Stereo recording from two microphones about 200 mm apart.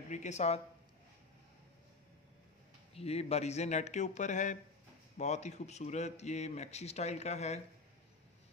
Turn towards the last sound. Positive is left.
turn(degrees=35)  # may be behind; listen again after turning